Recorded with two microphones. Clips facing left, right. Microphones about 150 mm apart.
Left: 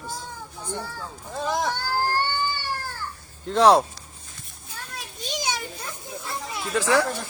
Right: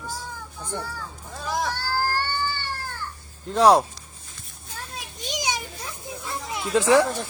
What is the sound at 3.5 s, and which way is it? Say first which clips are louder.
Speech: even; 5° right (ahead or behind).